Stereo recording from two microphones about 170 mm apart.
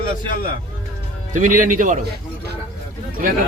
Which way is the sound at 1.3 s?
50° right (ahead or behind).